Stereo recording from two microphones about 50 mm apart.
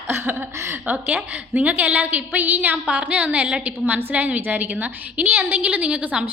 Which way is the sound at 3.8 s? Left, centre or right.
Right.